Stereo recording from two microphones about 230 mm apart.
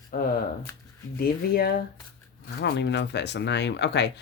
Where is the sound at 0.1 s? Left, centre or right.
Left.